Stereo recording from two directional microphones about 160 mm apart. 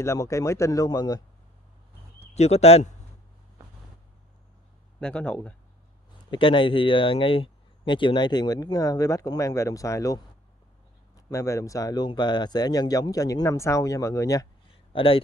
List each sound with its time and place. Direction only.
0.0 s speech: 15° left (ahead or behind)
2.3 s speech: 40° left (ahead or behind)
5.0 s speech: 10° left (ahead or behind)
6.3 s speech: 30° left (ahead or behind)
11.2 s speech: 20° left (ahead or behind)
14.9 s speech: 35° left (ahead or behind)